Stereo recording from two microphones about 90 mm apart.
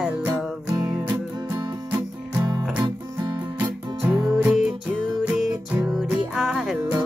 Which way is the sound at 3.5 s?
20° right (ahead or behind).